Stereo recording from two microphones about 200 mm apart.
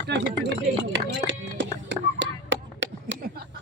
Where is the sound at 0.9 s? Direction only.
65° right (ahead or behind).